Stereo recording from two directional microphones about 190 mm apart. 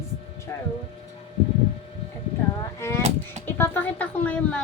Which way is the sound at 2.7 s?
15° left (ahead or behind).